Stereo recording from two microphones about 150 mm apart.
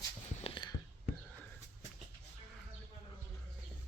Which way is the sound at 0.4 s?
30° left (ahead or behind).